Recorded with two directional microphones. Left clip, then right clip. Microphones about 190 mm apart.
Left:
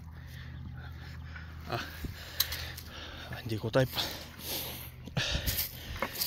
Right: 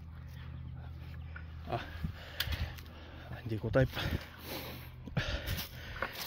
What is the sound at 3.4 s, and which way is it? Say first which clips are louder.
Speech: left 2 dB; 5° right (ahead or behind).